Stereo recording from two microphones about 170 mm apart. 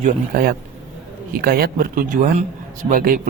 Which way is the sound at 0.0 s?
55° right (ahead or behind).